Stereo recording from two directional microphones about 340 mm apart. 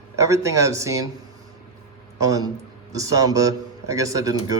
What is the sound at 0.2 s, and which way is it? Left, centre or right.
Speech, centre.